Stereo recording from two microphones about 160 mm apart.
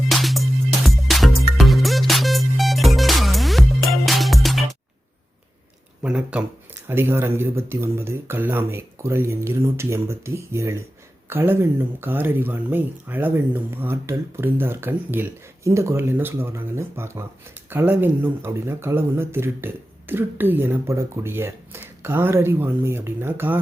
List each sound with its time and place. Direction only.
0.1 s music: centre (ahead or behind)
6.0 s speech: 5° right (ahead or behind)